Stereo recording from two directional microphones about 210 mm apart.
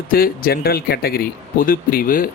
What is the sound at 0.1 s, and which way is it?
Speech, 45° left (ahead or behind).